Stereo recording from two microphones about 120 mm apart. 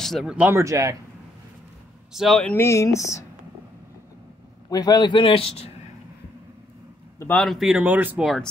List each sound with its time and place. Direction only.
0.0 s speech: centre (ahead or behind)
0.4 s speech: 20° right (ahead or behind)
2.1 s speech: centre (ahead or behind)
2.5 s speech: 25° left (ahead or behind)
4.6 s speech: 30° left (ahead or behind); by 5.7 s 55° left (ahead or behind)
7.2 s a man's voice: 15° left (ahead or behind)
7.4 s speech: 5° right (ahead or behind)
8.2 s speech: centre (ahead or behind)